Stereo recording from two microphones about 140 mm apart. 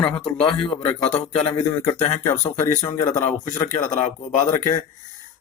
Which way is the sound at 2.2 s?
25° left (ahead or behind).